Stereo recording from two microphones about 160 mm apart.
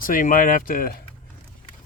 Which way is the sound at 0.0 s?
60° left (ahead or behind).